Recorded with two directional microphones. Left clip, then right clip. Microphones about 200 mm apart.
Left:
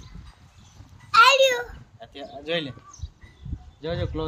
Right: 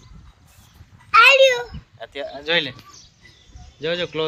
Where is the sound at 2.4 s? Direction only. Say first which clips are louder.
Right 7 dB; 5° left (ahead or behind).